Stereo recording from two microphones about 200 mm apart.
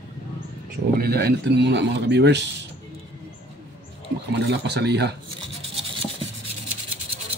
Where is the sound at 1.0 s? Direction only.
55° right (ahead or behind).